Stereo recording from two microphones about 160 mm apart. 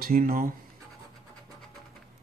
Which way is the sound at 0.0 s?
60° right (ahead or behind).